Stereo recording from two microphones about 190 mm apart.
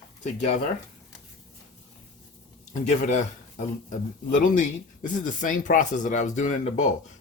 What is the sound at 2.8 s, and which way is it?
Speech, 40° left (ahead or behind).